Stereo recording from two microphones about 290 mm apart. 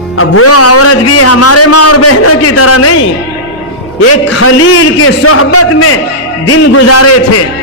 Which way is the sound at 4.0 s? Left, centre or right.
Left.